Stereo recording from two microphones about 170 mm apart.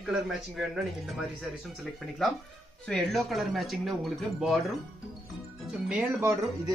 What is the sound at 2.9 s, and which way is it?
Speech, 5° left (ahead or behind).